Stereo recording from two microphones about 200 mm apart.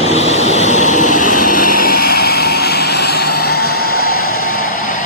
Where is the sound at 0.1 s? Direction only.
30° left (ahead or behind); by 4.2 s 50° left (ahead or behind).